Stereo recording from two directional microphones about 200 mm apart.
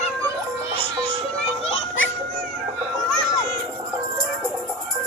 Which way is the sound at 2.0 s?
75° left (ahead or behind).